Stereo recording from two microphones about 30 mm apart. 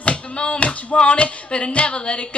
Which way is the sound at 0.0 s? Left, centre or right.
Left.